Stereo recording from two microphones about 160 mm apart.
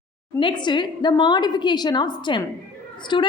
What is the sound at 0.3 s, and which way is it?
A woman's voice, 30° left (ahead or behind).